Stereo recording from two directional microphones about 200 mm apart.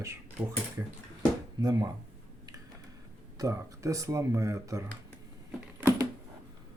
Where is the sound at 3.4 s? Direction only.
15° right (ahead or behind).